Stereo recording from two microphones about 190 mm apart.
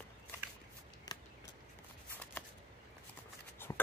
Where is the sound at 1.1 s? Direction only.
20° left (ahead or behind).